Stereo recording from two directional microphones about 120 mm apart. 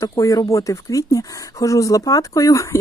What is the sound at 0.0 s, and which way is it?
Speech, 30° left (ahead or behind).